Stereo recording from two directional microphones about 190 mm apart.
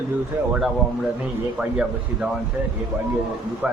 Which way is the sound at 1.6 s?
5° right (ahead or behind).